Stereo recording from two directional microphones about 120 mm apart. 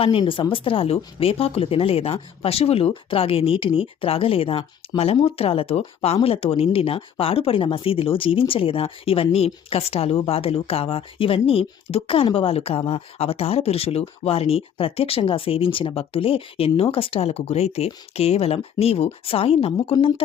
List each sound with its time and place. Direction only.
0.0 s speech: 50° left (ahead or behind)